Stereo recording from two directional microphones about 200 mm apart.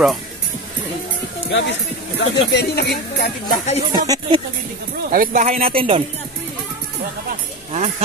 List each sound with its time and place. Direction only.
1.5 s speech: 65° left (ahead or behind); by 3.8 s 40° left (ahead or behind)
3.9 s speech: 20° right (ahead or behind)
5.1 s speech: 45° right (ahead or behind); by 6.0 s 30° right (ahead or behind)